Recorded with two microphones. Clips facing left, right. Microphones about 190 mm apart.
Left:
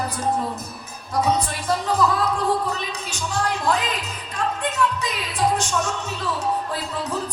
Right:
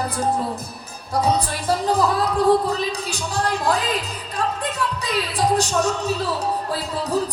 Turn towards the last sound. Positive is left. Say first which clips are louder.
# right 4 dB
turn(degrees=-35)  # may be behind; listen again after turning